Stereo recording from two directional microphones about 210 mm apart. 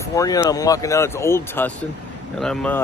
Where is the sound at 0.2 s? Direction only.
20° left (ahead or behind).